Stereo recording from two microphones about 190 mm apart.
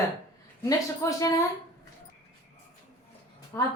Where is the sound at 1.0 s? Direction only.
15° left (ahead or behind).